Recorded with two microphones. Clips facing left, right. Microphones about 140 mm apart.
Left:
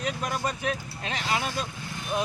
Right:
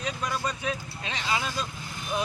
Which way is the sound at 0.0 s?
50° left (ahead or behind).